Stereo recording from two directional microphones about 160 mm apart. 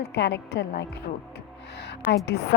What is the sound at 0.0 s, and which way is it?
A woman's voice, 90° left.